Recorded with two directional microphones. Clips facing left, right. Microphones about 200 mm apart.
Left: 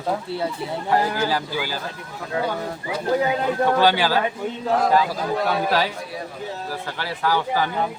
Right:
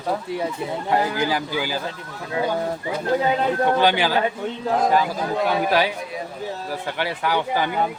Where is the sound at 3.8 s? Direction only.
15° right (ahead or behind).